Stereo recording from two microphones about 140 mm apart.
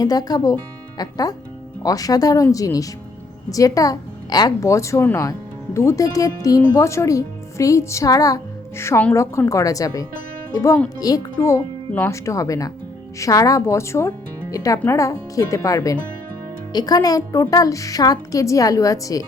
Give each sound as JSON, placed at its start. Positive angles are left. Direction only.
{"t": 0.0, "sound": "a woman's voice", "side_deg": 25}